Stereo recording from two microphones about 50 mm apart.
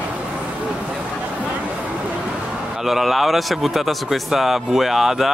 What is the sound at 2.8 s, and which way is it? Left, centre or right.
A man's voice, centre.